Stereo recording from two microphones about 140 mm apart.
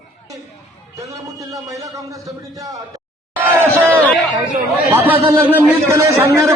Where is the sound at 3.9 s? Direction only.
10° left (ahead or behind).